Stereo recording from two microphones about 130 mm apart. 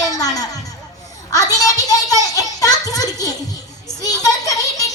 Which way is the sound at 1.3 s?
25° left (ahead or behind).